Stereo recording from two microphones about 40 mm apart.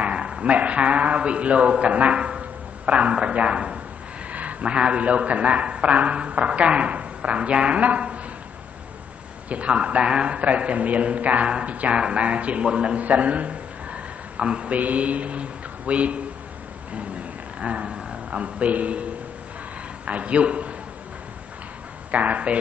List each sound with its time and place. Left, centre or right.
0.0 s a man's voice: right
9.5 s a man's voice: right
13.0 s a sound: right
14.8 s mantra: right
17.6 s speech: right
20.1 s a man's voice: right
22.1 s a man's voice: right